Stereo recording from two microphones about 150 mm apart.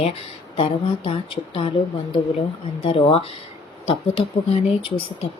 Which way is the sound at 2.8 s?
40° left (ahead or behind).